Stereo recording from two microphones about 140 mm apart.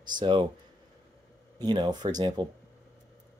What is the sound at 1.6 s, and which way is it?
Speech, 30° right (ahead or behind).